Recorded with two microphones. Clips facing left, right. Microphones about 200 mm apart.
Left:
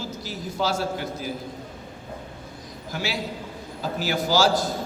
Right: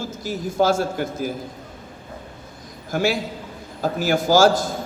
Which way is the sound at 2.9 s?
50° right (ahead or behind).